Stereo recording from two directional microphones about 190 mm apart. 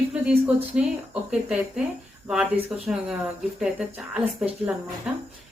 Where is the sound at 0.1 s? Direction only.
5° right (ahead or behind).